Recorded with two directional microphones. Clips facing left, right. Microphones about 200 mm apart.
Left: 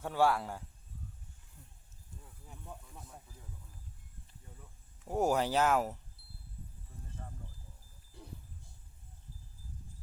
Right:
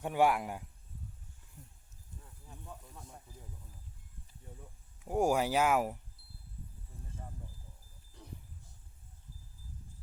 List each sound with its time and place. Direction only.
0.0 s speech: 15° right (ahead or behind)
2.2 s snake: 15° left (ahead or behind)
5.0 s speech: 10° right (ahead or behind)